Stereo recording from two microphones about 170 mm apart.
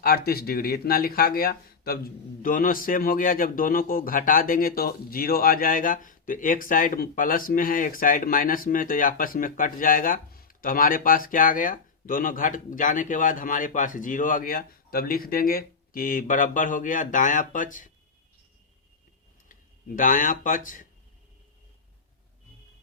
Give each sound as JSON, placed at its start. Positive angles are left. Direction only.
{"t": 0.3, "sound": "speech", "side_deg": 65}
{"t": 20.0, "sound": "speech", "side_deg": 50}